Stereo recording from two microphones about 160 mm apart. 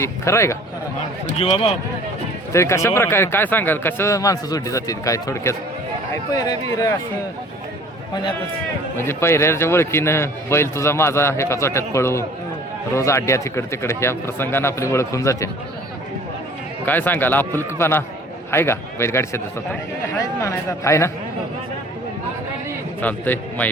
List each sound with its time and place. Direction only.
0.0 s a man's voice: 15° left (ahead or behind)
1.4 s speech: 40° left (ahead or behind)
2.5 s a man's voice: 20° left (ahead or behind)
9.0 s a man's voice: 15° left (ahead or behind)
16.8 s a man's voice: 10° left (ahead or behind)
23.0 s a man's voice: 10° left (ahead or behind)